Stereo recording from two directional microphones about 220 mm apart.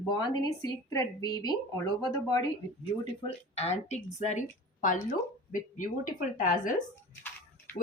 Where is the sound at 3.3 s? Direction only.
30° left (ahead or behind).